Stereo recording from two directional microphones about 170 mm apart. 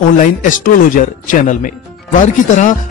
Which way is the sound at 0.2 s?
50° left (ahead or behind).